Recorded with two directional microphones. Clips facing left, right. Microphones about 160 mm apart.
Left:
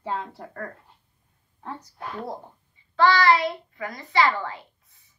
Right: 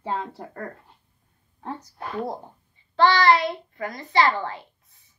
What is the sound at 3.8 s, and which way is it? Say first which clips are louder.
Speech: right 1 dB; 25° right (ahead or behind).